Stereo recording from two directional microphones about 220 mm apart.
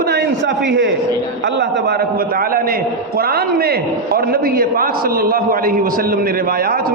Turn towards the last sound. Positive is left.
turn(degrees=-45)  # may be behind; listen again after turning